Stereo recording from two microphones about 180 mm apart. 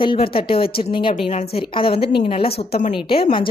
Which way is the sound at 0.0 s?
25° left (ahead or behind).